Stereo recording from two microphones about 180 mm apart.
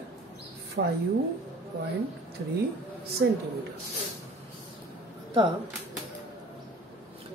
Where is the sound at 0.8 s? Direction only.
80° right.